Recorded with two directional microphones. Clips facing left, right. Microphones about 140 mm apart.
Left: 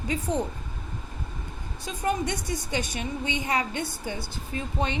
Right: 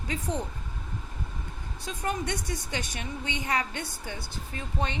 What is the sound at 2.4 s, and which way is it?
A woman's voice, 10° left (ahead or behind).